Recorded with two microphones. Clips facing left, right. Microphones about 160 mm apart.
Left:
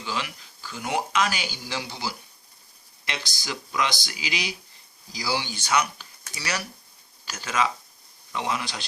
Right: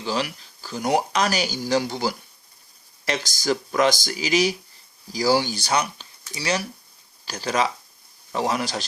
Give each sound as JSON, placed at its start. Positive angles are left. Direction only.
{"t": 0.0, "sound": "speech", "side_deg": -35}